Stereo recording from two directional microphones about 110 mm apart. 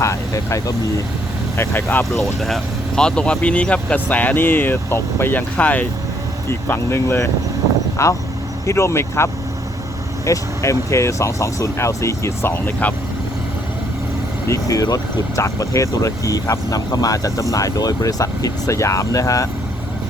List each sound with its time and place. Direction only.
0.0 s speech: 30° left (ahead or behind)
2.1 s speech: centre (ahead or behind); by 12.9 s 20° left (ahead or behind)
14.4 s speech: 30° left (ahead or behind)